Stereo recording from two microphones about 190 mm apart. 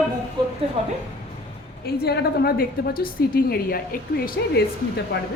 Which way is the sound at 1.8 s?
55° left (ahead or behind).